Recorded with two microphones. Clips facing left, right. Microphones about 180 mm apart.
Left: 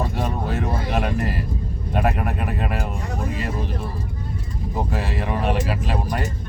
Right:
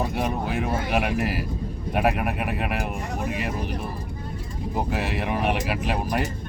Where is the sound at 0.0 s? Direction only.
10° right (ahead or behind).